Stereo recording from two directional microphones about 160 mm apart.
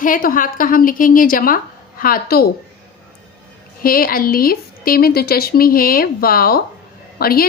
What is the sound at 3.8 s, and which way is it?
A woman's voice, 65° left (ahead or behind).